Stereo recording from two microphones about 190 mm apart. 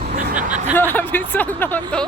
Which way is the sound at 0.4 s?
40° right (ahead or behind).